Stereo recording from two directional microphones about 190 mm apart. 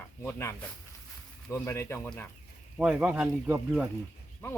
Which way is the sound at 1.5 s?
15° left (ahead or behind).